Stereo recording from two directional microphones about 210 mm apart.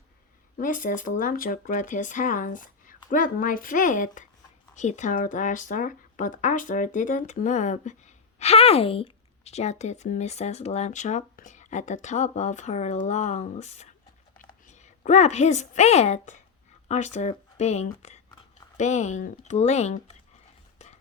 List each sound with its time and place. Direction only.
0.5 s speech: 40° left (ahead or behind)